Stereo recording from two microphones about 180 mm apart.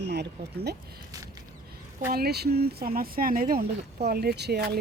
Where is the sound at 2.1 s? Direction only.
60° right (ahead or behind).